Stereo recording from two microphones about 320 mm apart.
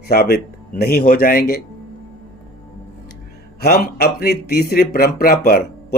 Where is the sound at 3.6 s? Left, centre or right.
Left.